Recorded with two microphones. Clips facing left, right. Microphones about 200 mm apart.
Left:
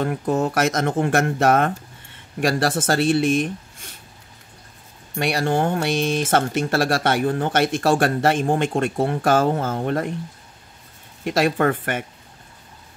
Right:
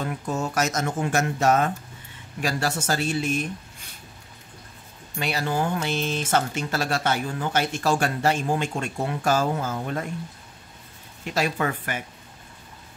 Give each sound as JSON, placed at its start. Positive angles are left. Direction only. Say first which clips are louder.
{"t": 0.0, "sound": "speech", "louder": "left 7 dB", "side_deg": 55}
{"t": 5.1, "sound": "speech", "louder": "left 5 dB", "side_deg": 55}
{"t": 11.2, "sound": "speech", "louder": "left 6 dB", "side_deg": 55}